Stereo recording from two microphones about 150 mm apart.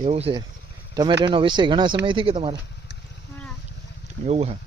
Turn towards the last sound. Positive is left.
turn(degrees=-45)  # may be behind; listen again after turning